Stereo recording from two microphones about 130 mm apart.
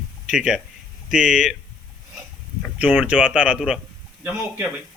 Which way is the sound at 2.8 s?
10° right (ahead or behind).